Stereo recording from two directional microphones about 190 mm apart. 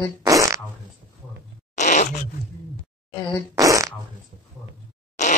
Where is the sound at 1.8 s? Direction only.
40° left (ahead or behind).